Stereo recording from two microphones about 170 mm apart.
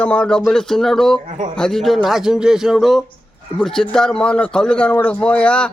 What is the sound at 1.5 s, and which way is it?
A man's voice, 5° left (ahead or behind).